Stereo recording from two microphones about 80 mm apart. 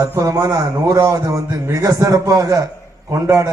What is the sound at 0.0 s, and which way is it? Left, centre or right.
A man's voice, right.